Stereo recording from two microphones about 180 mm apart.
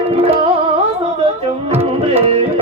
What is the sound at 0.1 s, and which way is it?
Music, 35° right (ahead or behind).